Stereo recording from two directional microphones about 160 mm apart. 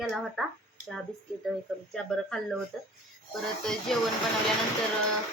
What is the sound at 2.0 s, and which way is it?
A woman's voice, centre (ahead or behind).